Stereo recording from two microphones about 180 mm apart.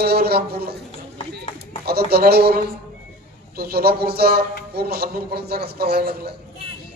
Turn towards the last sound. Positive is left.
turn(degrees=-60)  # may be behind; listen again after turning